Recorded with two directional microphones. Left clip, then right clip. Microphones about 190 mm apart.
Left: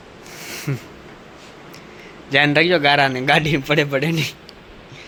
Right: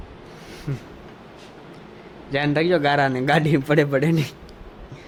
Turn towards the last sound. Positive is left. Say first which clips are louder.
# left 1 dB
turn(degrees=-20)  # may be behind; listen again after turning